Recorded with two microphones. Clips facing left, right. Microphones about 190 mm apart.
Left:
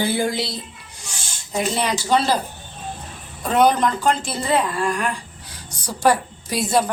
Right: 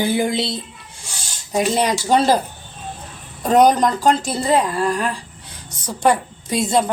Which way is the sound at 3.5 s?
40° right (ahead or behind).